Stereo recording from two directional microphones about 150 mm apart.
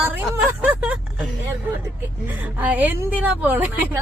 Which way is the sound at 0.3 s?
10° right (ahead or behind).